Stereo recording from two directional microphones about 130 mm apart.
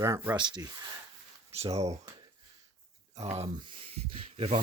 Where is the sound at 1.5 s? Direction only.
55° right (ahead or behind).